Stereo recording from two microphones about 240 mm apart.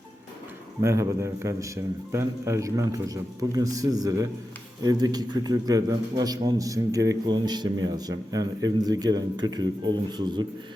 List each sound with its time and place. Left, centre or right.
0.8 s a man's voice: centre